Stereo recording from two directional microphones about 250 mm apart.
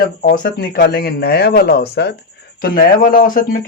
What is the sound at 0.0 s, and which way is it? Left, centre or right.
Speech, left.